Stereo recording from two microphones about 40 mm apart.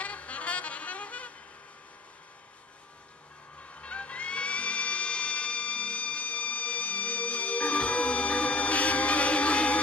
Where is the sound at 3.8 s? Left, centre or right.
Left.